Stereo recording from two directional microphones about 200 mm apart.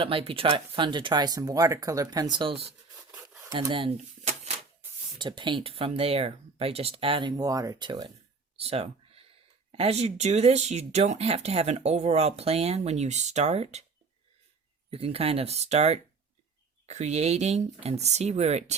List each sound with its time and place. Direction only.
0.0 s speech: 25° right (ahead or behind)
3.5 s a sound: 25° right (ahead or behind)
5.1 s speech: 25° right (ahead or behind)
8.5 s a sound: 30° right (ahead or behind)
9.7 s speech: 30° right (ahead or behind)
14.8 s speech: 30° right (ahead or behind)